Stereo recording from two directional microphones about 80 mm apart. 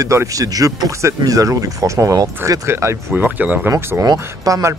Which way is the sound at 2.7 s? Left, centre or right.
Right.